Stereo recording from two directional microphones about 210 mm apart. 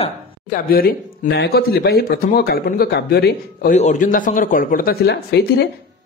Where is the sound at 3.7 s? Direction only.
35° left (ahead or behind); by 5.6 s 50° left (ahead or behind).